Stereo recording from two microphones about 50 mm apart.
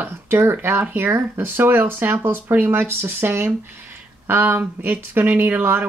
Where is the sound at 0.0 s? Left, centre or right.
Right.